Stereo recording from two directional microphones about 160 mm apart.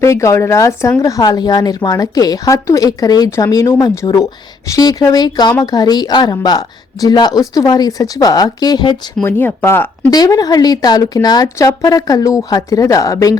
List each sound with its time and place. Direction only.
0.0 s speech: 20° left (ahead or behind)
9.2 s speech: 15° left (ahead or behind)